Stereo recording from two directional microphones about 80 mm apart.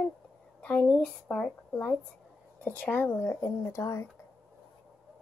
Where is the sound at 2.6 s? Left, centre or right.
Left.